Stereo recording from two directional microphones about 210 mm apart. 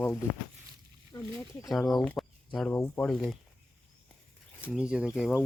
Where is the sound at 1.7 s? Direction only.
Centre (ahead or behind).